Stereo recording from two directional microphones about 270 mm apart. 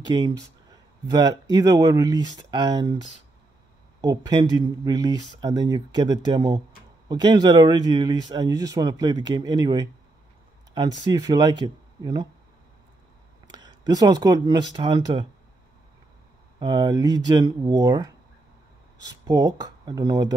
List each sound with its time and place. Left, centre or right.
0.0 s a sound: centre
1.5 s speech: centre
13.5 s speech: centre
16.5 s speech: centre